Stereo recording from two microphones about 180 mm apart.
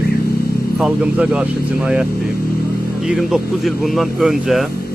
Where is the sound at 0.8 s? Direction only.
5° right (ahead or behind).